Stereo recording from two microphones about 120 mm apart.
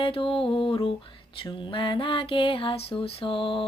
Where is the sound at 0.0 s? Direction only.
50° left (ahead or behind).